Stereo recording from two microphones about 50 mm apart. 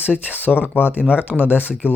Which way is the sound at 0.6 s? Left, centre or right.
Left.